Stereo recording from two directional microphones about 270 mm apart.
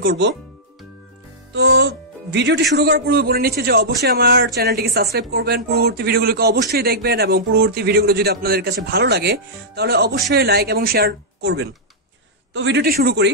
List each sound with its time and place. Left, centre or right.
0.0 s a man's voice: right
1.5 s a man's voice: right